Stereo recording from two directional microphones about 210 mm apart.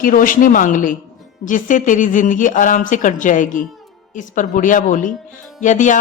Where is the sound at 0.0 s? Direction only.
40° left (ahead or behind).